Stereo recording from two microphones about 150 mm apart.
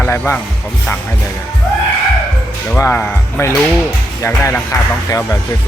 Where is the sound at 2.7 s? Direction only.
15° left (ahead or behind).